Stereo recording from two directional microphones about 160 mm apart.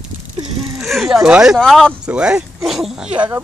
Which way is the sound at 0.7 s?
Centre (ahead or behind).